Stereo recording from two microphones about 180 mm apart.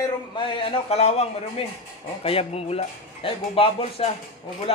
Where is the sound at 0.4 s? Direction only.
30° left (ahead or behind).